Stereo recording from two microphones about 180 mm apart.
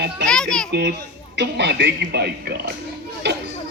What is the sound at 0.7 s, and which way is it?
A child's voice, 65° right (ahead or behind).